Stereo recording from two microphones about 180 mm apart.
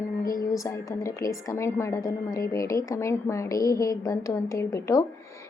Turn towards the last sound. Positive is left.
turn(degrees=15)  # may be behind; listen again after turning